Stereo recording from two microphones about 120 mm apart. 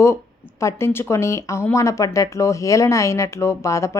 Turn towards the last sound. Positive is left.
turn(degrees=25)  # may be behind; listen again after turning